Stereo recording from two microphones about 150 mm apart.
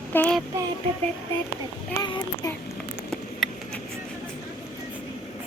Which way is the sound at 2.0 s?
25° left (ahead or behind).